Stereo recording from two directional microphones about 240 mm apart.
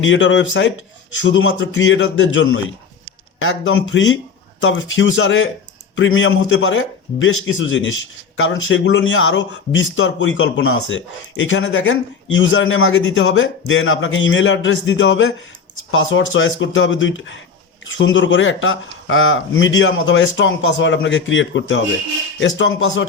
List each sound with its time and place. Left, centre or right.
0.0 s a man's voice: left